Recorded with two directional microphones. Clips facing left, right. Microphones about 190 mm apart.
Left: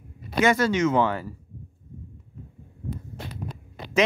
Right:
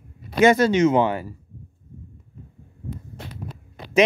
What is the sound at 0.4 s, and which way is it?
Speech, 20° right (ahead or behind).